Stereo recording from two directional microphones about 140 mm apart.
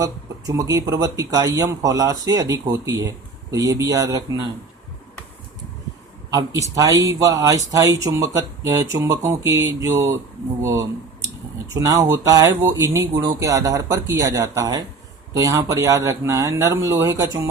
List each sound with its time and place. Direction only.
0.0 s speech: 25° right (ahead or behind)
6.3 s speech: 25° right (ahead or behind)